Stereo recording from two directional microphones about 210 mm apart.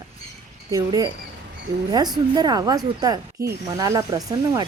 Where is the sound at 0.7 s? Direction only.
20° right (ahead or behind).